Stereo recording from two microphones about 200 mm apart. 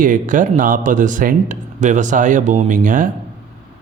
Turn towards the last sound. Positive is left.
turn(degrees=-40)  # may be behind; listen again after turning